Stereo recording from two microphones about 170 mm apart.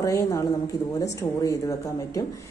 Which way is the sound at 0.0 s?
20° left (ahead or behind).